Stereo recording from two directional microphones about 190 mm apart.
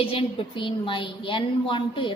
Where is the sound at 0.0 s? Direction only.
30° left (ahead or behind).